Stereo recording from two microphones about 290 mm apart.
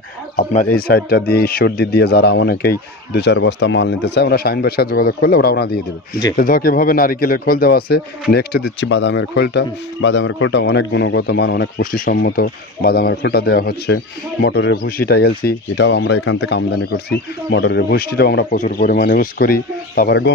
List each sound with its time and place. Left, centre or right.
0.4 s a man's voice: left